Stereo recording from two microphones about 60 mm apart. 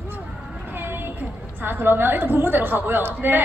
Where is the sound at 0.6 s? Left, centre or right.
Right.